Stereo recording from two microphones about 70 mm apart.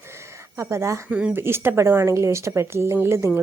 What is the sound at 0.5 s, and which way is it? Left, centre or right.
A woman's voice, right.